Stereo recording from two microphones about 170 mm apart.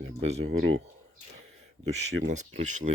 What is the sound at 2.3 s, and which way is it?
Speech, 45° right (ahead or behind).